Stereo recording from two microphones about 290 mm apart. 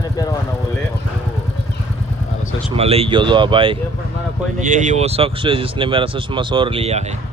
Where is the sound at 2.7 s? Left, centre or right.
Centre.